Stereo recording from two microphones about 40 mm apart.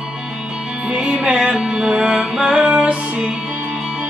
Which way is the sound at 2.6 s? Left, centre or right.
Right.